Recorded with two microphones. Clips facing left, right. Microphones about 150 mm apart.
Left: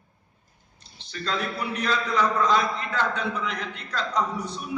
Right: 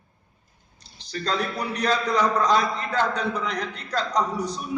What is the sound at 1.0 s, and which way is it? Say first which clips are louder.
A man's voice: right 3 dB; 40° right (ahead or behind).